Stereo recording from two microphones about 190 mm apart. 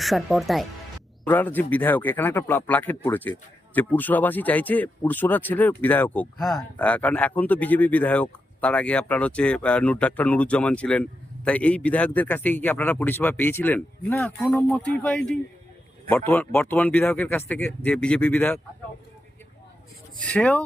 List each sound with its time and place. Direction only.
0.0 s speech: centre (ahead or behind)
20.2 s speech: 5° left (ahead or behind)